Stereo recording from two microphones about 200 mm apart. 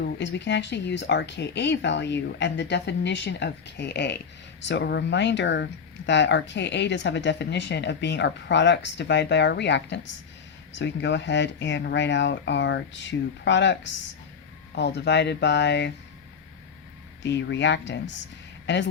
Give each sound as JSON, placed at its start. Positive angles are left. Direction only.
{"t": 0.2, "sound": "speech", "side_deg": 60}
{"t": 17.2, "sound": "speech", "side_deg": 60}